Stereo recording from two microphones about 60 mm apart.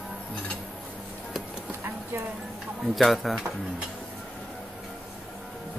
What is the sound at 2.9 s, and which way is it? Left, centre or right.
Speech, centre.